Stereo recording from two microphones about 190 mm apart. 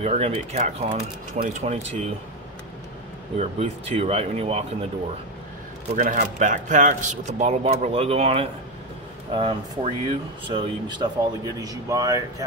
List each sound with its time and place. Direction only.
0.0 s a man's voice: 35° right (ahead or behind)
3.3 s a man's voice: 30° right (ahead or behind)
5.9 s a man's voice: 45° right (ahead or behind); by 12.4 s 20° right (ahead or behind)